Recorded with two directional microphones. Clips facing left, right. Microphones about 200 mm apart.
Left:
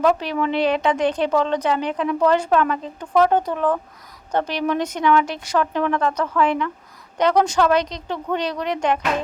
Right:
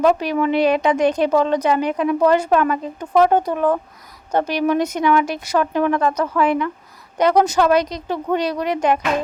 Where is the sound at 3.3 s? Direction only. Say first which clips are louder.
Right 2 dB; 10° right (ahead or behind).